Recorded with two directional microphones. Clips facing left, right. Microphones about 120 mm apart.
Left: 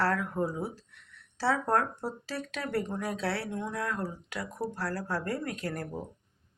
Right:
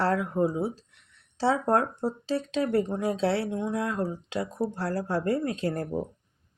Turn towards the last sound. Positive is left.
turn(degrees=-25)  # may be behind; listen again after turning